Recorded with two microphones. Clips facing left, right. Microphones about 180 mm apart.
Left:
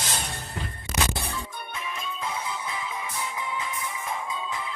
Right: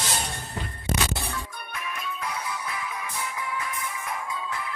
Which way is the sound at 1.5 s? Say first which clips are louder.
Left 1 dB; 25° left (ahead or behind).